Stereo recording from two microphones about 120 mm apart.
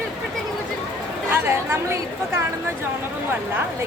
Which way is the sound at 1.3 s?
20° right (ahead or behind).